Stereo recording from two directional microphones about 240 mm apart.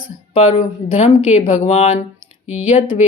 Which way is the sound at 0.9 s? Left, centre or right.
Left.